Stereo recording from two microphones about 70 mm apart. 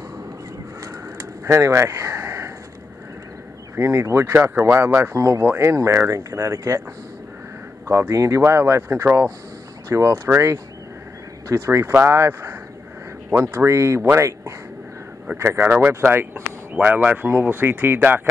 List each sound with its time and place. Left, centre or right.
1.1 s a sound: right
3.7 s speech: right
5.1 s speech: right
5.4 s speech: right
5.7 s speech: right
8.1 s speech: right
11.5 s speech: right
15.3 s speech: right